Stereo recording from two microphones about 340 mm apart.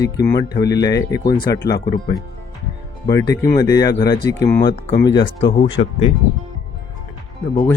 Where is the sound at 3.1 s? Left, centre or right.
Centre.